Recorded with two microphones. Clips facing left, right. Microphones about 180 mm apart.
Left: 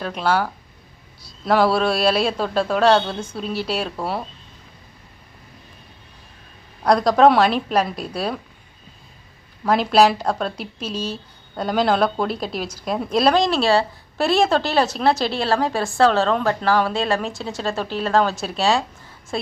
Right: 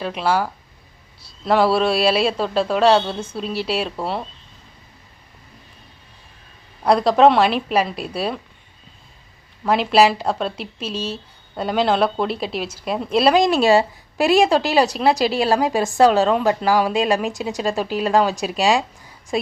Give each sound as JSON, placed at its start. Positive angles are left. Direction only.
{"t": 0.0, "sound": "a man's voice", "side_deg": 0}
{"t": 6.8, "sound": "a man's voice", "side_deg": -5}
{"t": 9.6, "sound": "a man's voice", "side_deg": -5}
{"t": 10.8, "sound": "speech", "side_deg": -30}
{"t": 11.5, "sound": "a man's voice", "side_deg": 0}